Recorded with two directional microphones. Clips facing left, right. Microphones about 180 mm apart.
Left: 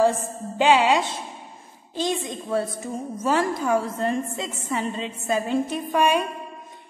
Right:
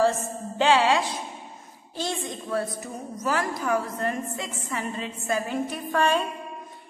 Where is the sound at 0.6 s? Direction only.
15° left (ahead or behind).